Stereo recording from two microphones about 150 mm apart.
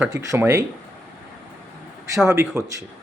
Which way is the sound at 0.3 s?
20° right (ahead or behind).